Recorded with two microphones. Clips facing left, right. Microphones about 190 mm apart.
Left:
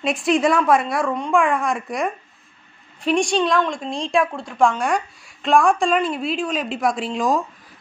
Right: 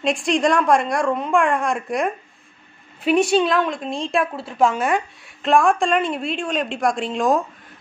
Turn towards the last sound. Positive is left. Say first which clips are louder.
# right 1 dB
turn(degrees=0)  # may be behind; listen again after turning